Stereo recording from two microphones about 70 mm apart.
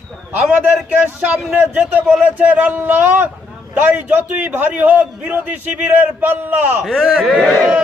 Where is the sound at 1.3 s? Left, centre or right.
Right.